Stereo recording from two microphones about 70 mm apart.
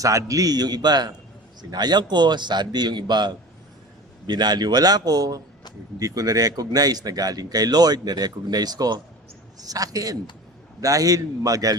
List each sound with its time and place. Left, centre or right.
0.0 s a man's voice: right